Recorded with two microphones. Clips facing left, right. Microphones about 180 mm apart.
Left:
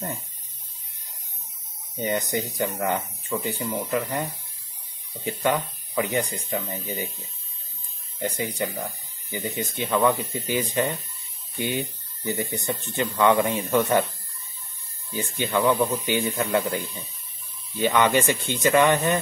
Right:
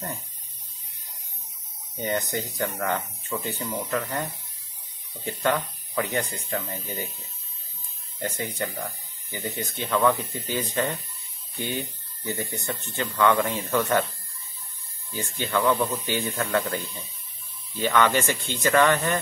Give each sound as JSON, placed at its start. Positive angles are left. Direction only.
{"t": 2.0, "sound": "speech", "side_deg": 15}
{"t": 8.2, "sound": "speech", "side_deg": 10}
{"t": 15.1, "sound": "speech", "side_deg": 15}